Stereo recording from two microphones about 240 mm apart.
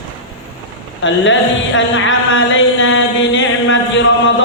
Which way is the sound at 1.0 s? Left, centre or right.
Left.